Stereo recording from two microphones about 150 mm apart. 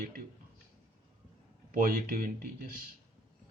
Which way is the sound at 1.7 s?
70° right (ahead or behind).